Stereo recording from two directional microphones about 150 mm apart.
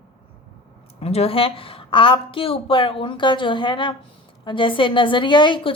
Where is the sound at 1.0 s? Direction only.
40° left (ahead or behind).